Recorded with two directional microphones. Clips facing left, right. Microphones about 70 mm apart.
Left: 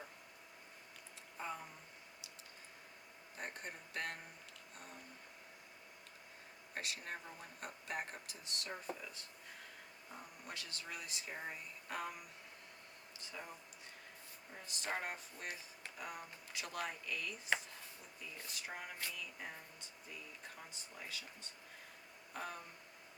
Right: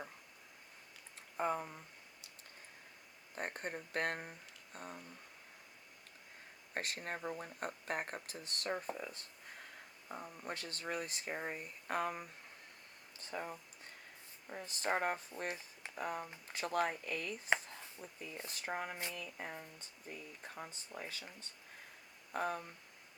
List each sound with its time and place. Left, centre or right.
1.4 s speech: right
3.3 s speech: right
4.7 s a sound: right
6.7 s speech: right
14.5 s speech: right
20.6 s speech: right
22.3 s speech: right